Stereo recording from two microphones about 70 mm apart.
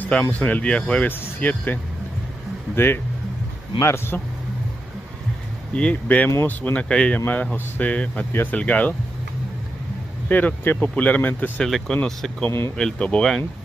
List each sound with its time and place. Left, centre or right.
0.3 s speech: left
1.0 s speech: left
2.7 s speech: left
5.8 s speech: centre
7.2 s speech: left
7.9 s speech: centre
8.3 s speech: left
8.5 s speech: centre
10.2 s speech: left
11.6 s speech: centre
12.4 s speech: left
12.7 s speech: centre